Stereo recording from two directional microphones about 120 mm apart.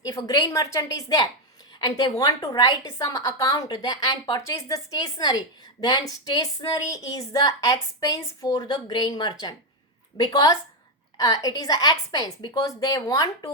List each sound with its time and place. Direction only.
0.0 s a woman's voice: 30° left (ahead or behind)